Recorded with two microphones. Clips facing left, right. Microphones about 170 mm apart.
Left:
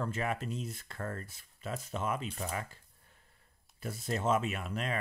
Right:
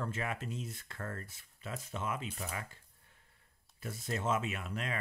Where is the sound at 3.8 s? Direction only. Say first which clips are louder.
Left 3 dB; 35° left (ahead or behind).